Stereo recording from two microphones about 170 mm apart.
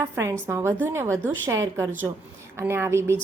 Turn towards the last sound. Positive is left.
turn(degrees=-15)  # may be behind; listen again after turning